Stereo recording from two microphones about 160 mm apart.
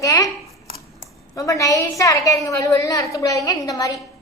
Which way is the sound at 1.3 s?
20° left (ahead or behind).